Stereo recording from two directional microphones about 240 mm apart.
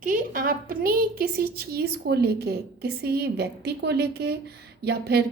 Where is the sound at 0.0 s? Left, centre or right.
Right.